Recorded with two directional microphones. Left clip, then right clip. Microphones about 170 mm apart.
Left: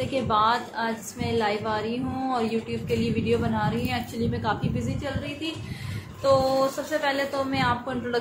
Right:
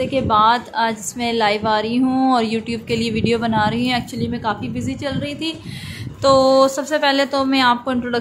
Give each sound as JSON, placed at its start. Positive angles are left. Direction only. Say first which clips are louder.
{"t": 0.0, "sound": "a woman's voice", "louder": "right 8 dB", "side_deg": -35}
{"t": 6.2, "sound": "a woman's voice", "louder": "right 9 dB", "side_deg": -60}